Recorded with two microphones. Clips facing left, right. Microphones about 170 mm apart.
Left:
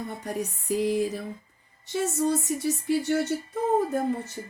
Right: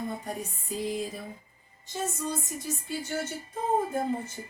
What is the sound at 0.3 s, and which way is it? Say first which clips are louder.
Speech: left 7 dB; 70° left (ahead or behind).